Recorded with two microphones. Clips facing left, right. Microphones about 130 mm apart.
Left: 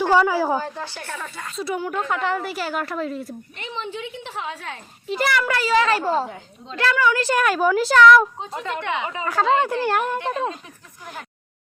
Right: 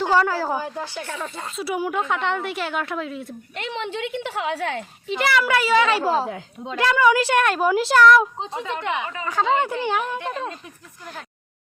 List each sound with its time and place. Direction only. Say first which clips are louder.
0.1 s a woman's voice: left 2 dB; 15° left (ahead or behind)
0.5 s speech: left 1 dB; 15° right (ahead or behind)
2.0 s a woman's voice: even; centre (ahead or behind)
3.5 s a woman's voice: right 5 dB; 85° right
5.0 s a woman's voice: right 1 dB; centre (ahead or behind); by 7.2 s 15° right (ahead or behind)
7.3 s a woman's voice: even; centre (ahead or behind)
8.8 s speech: even; 15° right (ahead or behind)
9.2 s a woman's voice: left 2 dB; centre (ahead or behind)